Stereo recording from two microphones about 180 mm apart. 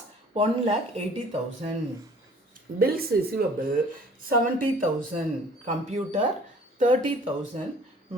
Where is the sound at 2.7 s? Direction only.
55° right (ahead or behind).